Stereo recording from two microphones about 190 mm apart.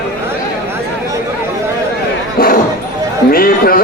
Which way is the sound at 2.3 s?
50° left (ahead or behind).